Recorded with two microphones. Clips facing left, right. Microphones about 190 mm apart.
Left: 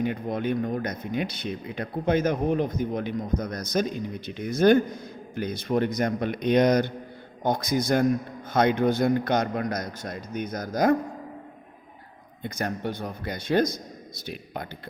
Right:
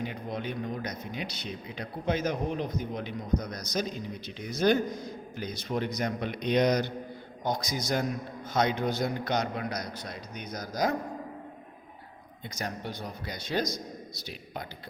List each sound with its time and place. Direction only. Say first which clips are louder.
0.0 s speech: left 7 dB; 55° left (ahead or behind)
12.4 s speech: left 7 dB; 55° left (ahead or behind)